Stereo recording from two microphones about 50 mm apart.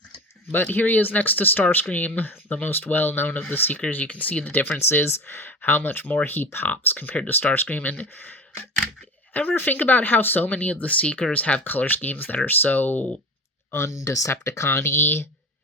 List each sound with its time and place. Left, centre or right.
0.5 s speech: left
3.8 s speech: left
4.9 s speech: left
10.5 s speech: left
13.7 s speech: left